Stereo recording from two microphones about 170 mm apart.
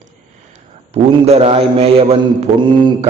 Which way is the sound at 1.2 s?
35° right (ahead or behind).